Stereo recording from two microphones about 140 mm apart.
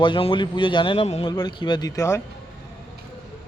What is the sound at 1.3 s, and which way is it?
Speech, 30° left (ahead or behind).